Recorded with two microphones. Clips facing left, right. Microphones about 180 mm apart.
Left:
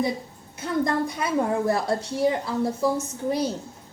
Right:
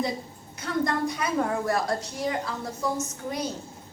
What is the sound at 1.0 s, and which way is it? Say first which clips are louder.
A woman's voice: left 2 dB; 25° left (ahead or behind).